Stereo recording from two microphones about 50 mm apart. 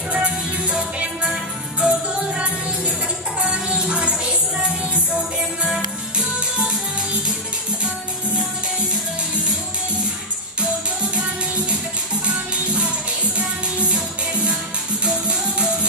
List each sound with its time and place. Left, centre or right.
0.1 s music: right
12.3 s music: right